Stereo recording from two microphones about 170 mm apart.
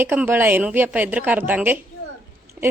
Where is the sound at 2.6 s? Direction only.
10° right (ahead or behind).